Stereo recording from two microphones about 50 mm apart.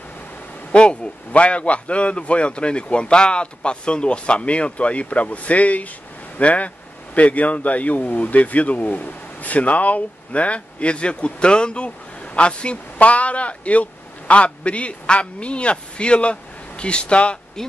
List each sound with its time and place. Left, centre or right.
0.7 s a man's voice: left
17.6 s speech: centre